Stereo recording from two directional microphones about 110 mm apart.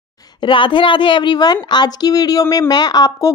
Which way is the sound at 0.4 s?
50° left (ahead or behind).